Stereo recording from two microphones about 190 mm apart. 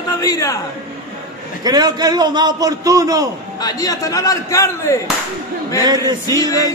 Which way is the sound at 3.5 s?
20° left (ahead or behind).